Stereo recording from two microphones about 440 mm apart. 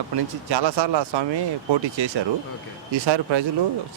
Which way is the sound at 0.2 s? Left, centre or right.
Right.